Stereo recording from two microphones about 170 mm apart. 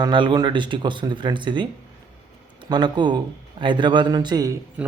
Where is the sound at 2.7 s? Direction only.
25° right (ahead or behind).